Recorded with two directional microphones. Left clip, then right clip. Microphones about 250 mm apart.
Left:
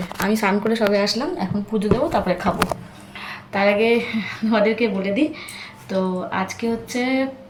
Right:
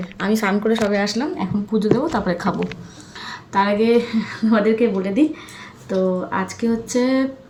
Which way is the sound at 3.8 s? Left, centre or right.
Centre.